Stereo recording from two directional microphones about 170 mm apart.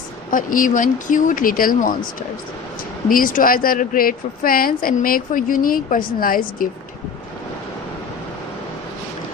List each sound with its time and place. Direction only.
0.3 s speech: 50° left (ahead or behind)
3.1 s speech: 55° left (ahead or behind)